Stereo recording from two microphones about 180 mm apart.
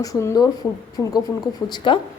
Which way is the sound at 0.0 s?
15° left (ahead or behind).